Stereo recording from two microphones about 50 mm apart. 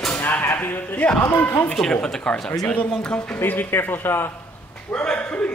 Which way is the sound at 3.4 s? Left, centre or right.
Left.